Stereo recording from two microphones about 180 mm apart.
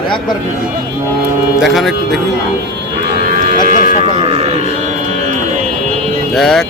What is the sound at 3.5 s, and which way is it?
Livestock, 50° left (ahead or behind).